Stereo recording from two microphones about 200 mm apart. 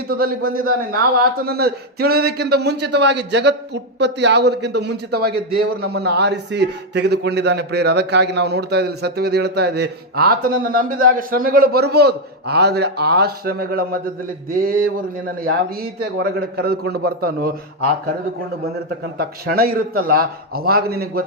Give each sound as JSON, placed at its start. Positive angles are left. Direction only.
{"t": 0.1, "sound": "a man's voice", "side_deg": -45}
{"t": 19.1, "sound": "a man's voice", "side_deg": -50}